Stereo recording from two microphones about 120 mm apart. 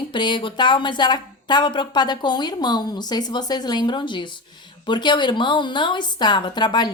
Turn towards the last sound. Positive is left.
turn(degrees=40)  # may be behind; listen again after turning